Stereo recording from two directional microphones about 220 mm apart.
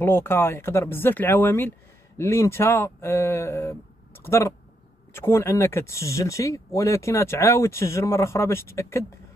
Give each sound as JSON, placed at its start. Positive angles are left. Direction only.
{"t": 0.0, "sound": "speech", "side_deg": 10}